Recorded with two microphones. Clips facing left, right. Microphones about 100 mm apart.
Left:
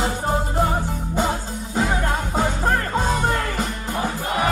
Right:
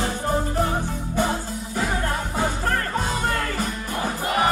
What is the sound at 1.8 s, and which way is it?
Music, 20° left (ahead or behind).